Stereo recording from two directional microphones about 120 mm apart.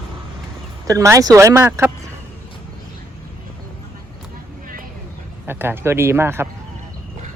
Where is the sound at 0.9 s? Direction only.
25° right (ahead or behind).